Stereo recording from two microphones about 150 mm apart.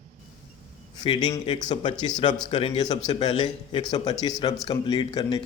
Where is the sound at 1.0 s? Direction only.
30° left (ahead or behind).